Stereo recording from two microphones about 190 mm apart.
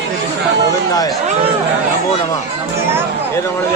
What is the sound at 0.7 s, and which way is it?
Speech, 20° left (ahead or behind).